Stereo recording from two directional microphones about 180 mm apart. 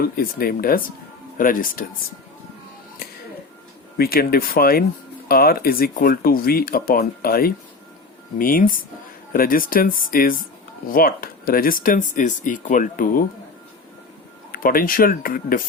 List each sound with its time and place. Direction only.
0.2 s speech: 55° left (ahead or behind)
3.9 s speech: 55° left (ahead or behind)
14.5 s speech: 55° left (ahead or behind)